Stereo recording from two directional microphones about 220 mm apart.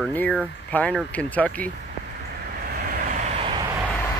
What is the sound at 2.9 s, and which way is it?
Vehicle, 40° right (ahead or behind).